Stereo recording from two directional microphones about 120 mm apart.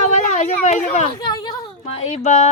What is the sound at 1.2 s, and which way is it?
Speech, 35° left (ahead or behind).